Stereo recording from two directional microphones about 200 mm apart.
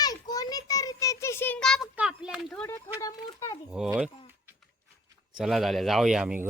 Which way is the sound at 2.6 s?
15° left (ahead or behind).